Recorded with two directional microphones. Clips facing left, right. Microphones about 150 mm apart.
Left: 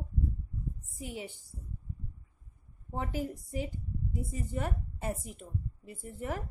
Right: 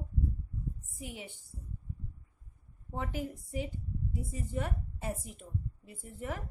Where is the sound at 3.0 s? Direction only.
35° left (ahead or behind).